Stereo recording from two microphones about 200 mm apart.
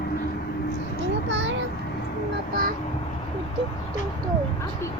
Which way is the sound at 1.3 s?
60° right (ahead or behind).